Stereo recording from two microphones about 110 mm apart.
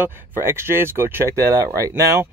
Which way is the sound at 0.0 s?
25° right (ahead or behind).